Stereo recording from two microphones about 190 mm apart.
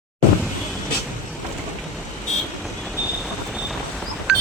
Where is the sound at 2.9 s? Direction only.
Centre (ahead or behind).